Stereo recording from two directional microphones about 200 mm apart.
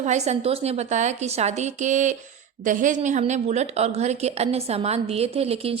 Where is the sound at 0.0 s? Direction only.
35° right (ahead or behind).